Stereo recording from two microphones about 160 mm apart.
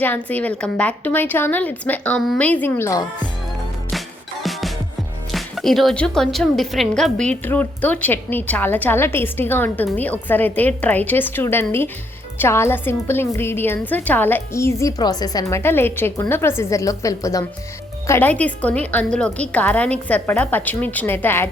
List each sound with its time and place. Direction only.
0.0 s a woman's voice: 10° left (ahead or behind)
5.3 s a woman's voice: centre (ahead or behind)